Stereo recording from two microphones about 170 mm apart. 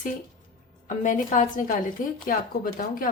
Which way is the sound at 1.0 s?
50° left (ahead or behind).